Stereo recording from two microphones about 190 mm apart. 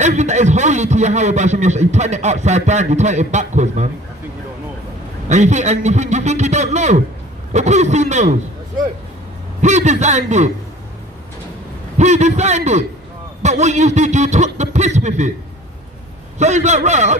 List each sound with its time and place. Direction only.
0.0 s a man's voice: 40° right (ahead or behind)
5.3 s a man's voice: 35° right (ahead or behind)
9.6 s a man's voice: 35° right (ahead or behind)
12.0 s a man's voice: 40° right (ahead or behind)
16.3 s a man's voice: 35° right (ahead or behind)